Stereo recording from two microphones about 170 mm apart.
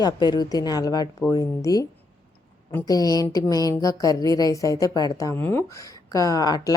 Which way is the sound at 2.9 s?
20° left (ahead or behind).